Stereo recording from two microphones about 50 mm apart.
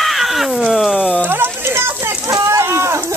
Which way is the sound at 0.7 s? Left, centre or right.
Centre.